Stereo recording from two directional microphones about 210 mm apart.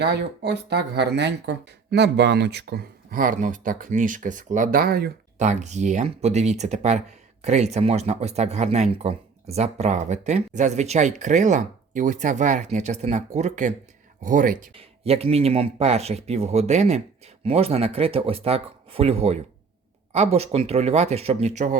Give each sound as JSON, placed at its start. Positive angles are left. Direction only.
{"t": 0.0, "sound": "speech", "side_deg": -55}
{"t": 14.8, "sound": "speech", "side_deg": -30}